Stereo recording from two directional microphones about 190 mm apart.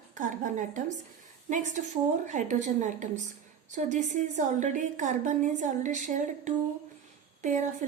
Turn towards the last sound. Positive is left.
turn(degrees=-40)  # may be behind; listen again after turning